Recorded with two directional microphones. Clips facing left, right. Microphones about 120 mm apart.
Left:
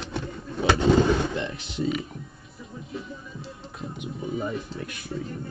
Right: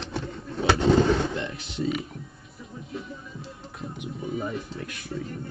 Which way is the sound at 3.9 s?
30° left (ahead or behind).